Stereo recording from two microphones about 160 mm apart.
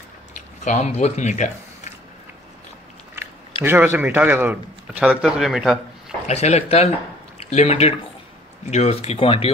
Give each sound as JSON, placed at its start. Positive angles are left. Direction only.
{"t": 0.7, "sound": "speech", "side_deg": 45}
{"t": 3.6, "sound": "a man's voice", "side_deg": -15}
{"t": 6.2, "sound": "speech", "side_deg": 45}